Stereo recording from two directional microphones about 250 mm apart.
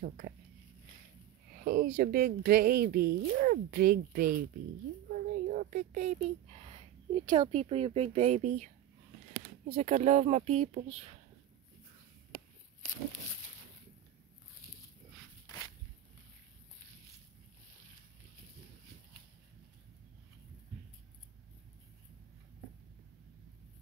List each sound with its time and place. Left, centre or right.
1.5 s speech: right
9.8 s speech: right
15.4 s walk: centre